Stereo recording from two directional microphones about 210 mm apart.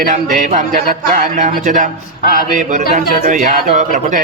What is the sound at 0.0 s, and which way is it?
Speech, 35° right (ahead or behind).